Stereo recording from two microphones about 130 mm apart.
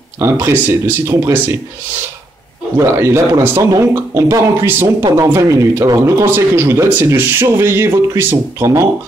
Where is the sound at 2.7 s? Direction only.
20° right (ahead or behind).